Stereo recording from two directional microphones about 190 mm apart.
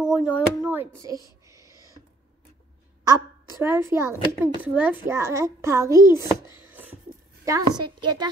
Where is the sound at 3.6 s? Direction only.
10° right (ahead or behind).